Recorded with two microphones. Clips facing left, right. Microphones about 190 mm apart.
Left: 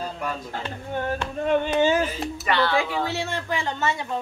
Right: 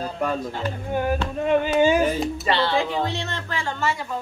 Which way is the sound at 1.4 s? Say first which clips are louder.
Right 2 dB; 5° right (ahead or behind).